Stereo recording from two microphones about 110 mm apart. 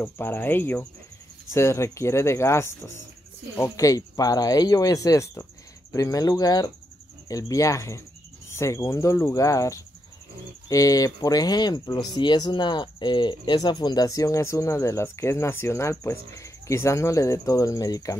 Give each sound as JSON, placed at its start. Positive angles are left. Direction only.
{"t": 0.0, "sound": "cricket", "side_deg": 20}
{"t": 1.5, "sound": "speech", "side_deg": 25}